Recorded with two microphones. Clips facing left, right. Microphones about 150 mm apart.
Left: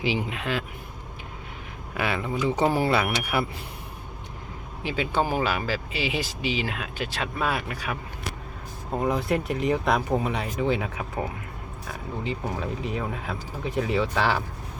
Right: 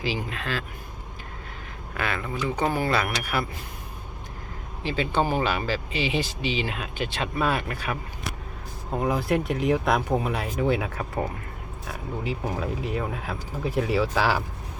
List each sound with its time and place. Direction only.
0.0 s speech: 20° left (ahead or behind)
2.0 s speech: 15° left (ahead or behind)
4.8 s speech: 10° left (ahead or behind)